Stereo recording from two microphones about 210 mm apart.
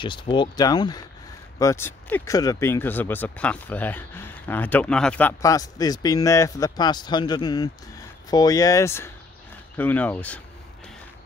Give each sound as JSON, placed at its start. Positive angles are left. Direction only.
{"t": 0.0, "sound": "speech", "side_deg": 20}